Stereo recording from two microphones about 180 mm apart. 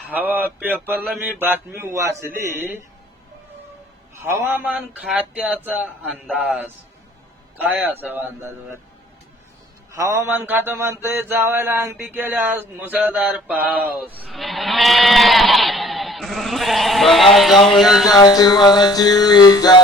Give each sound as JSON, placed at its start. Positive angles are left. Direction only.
{"t": 0.1, "sound": "speech", "side_deg": -10}
{"t": 4.4, "sound": "a man's voice", "side_deg": -10}
{"t": 9.9, "sound": "mantra", "side_deg": -15}
{"t": 18.1, "sound": "a sound", "side_deg": 20}